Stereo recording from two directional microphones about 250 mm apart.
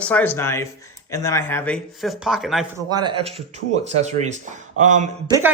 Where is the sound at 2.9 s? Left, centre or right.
Centre.